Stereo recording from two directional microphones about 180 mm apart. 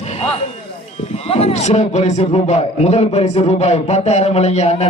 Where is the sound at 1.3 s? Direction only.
35° left (ahead or behind).